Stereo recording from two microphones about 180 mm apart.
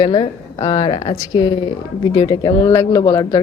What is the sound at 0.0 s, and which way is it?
A woman's voice, 25° left (ahead or behind).